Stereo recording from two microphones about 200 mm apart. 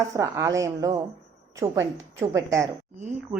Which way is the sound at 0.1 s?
15° right (ahead or behind).